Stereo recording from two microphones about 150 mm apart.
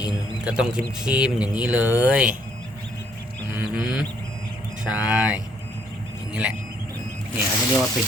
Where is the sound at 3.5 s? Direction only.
5° right (ahead or behind).